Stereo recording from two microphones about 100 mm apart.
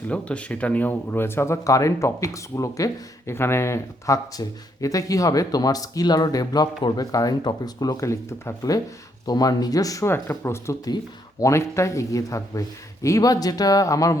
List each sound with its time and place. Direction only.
0.1 s speech: 10° left (ahead or behind); by 10.1 s 35° left (ahead or behind)
10.1 s speech: 25° left (ahead or behind)
10.8 s speech: 35° left (ahead or behind)